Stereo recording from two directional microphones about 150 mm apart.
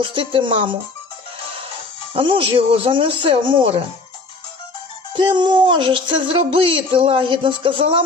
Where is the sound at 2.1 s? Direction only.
35° right (ahead or behind).